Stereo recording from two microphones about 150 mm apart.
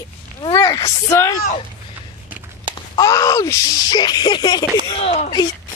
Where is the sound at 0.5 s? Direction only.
20° left (ahead or behind).